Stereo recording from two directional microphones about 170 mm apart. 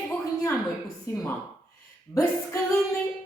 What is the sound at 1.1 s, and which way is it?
Speech, 15° left (ahead or behind).